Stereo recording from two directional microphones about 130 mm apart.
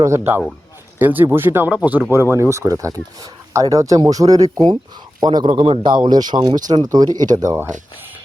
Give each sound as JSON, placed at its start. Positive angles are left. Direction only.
{"t": 0.0, "sound": "speech", "side_deg": -20}